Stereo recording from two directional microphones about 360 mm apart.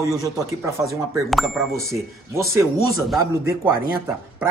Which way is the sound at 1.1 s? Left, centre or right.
Centre.